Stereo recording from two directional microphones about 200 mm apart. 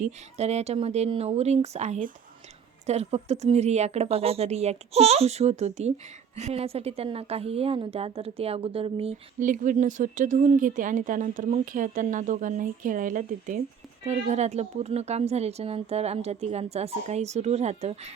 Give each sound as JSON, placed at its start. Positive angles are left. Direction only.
{"t": 0.0, "sound": "speech", "side_deg": -35}